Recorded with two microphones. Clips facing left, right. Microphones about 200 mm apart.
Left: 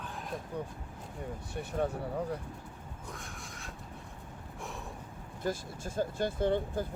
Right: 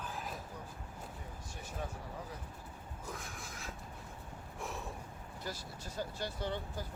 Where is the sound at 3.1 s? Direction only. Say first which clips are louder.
Even; centre (ahead or behind).